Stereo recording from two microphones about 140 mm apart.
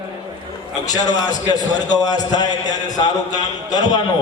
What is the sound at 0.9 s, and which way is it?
A man's voice, 30° left (ahead or behind).